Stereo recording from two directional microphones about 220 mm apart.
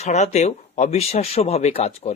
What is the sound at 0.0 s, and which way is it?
Speech, 30° left (ahead or behind).